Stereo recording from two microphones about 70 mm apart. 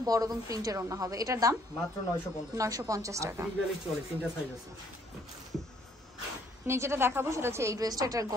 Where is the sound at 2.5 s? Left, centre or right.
Right.